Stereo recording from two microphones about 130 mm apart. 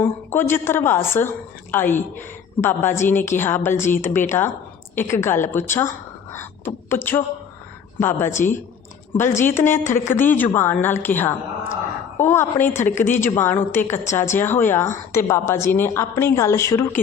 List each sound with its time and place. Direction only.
0.0 s a woman's voice: 15° left (ahead or behind)